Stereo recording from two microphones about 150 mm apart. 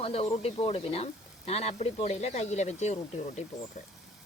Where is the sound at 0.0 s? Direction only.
40° left (ahead or behind).